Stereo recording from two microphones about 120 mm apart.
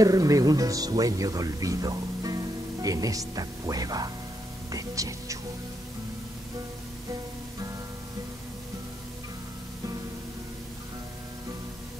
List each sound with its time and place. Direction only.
0.0 s speech: 30° right (ahead or behind)